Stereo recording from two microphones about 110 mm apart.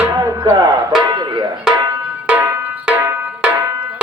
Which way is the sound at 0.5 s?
35° right (ahead or behind).